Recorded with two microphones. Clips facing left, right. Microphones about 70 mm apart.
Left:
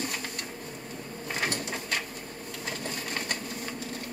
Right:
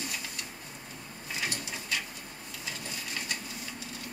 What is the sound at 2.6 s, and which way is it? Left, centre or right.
Sewing machine, left.